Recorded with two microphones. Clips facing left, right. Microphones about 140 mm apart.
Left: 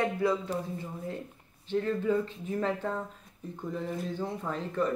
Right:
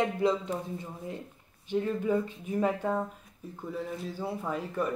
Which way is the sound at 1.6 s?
15° right (ahead or behind).